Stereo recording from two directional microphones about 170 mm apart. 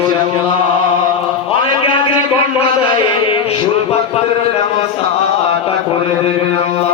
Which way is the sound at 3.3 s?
30° left (ahead or behind).